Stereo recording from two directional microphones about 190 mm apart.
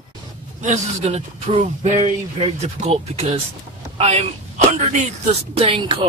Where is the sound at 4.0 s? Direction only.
35° right (ahead or behind).